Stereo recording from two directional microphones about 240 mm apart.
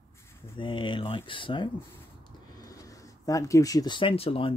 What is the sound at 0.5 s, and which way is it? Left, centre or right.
Speech, left.